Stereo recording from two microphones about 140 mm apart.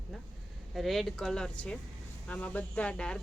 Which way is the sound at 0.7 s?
Centre (ahead or behind).